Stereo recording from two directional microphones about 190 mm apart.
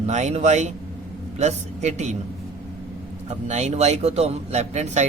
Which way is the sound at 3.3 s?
35° right (ahead or behind).